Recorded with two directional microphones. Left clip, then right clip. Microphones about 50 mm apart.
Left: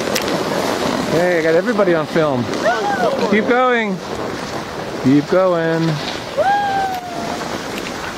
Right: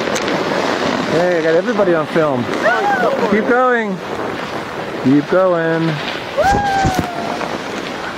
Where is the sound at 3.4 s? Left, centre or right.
Left.